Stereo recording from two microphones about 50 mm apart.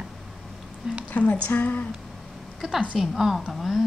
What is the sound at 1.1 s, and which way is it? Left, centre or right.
Speech, left.